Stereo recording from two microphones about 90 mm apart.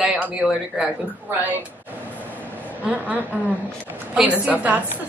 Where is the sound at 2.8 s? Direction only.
15° right (ahead or behind).